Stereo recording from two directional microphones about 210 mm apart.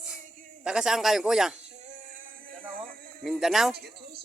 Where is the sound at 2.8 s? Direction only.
45° right (ahead or behind).